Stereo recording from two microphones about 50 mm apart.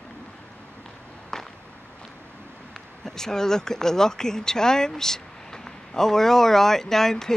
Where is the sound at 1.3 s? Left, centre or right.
Centre.